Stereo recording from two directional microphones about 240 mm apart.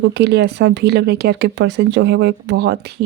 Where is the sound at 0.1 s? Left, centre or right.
Right.